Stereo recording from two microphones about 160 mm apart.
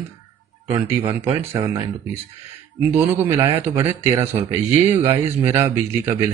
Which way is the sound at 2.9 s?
15° right (ahead or behind).